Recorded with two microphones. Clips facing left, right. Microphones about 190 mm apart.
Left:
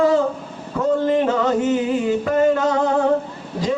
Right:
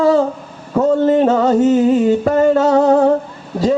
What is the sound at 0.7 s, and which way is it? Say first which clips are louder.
Music: right 5 dB; 40° right (ahead or behind).